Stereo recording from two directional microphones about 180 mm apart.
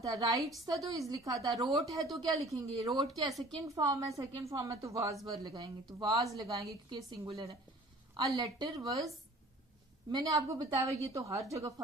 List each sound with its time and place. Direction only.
0.0 s a woman's voice: 20° right (ahead or behind)
2.9 s speech: centre (ahead or behind)
3.8 s a woman's voice: 20° right (ahead or behind)
10.1 s a woman's voice: 20° right (ahead or behind)